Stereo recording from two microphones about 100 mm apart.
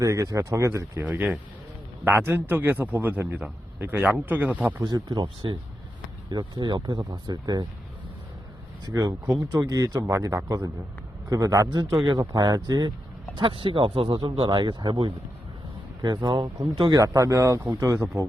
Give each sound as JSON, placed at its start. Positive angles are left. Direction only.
{"t": 0.0, "sound": "speech", "side_deg": -35}
{"t": 1.0, "sound": "a man's voice", "side_deg": -15}
{"t": 4.8, "sound": "speech", "side_deg": -40}
{"t": 8.9, "sound": "speech", "side_deg": -40}
{"t": 13.3, "sound": "speech", "side_deg": -60}
{"t": 14.4, "sound": "speech", "side_deg": -50}